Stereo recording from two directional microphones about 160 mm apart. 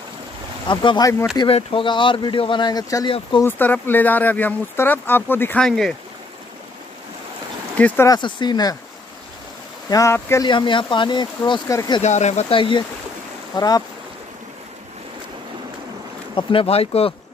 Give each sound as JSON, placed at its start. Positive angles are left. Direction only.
{"t": 0.7, "sound": "speech", "side_deg": 30}
{"t": 3.4, "sound": "speech", "side_deg": 10}
{"t": 7.7, "sound": "speech", "side_deg": 10}
{"t": 8.1, "sound": "speech", "side_deg": 30}
{"t": 9.8, "sound": "speech", "side_deg": 20}
{"t": 10.5, "sound": "speech", "side_deg": 30}
{"t": 12.0, "sound": "speech", "side_deg": 45}
{"t": 16.3, "sound": "speech", "side_deg": 35}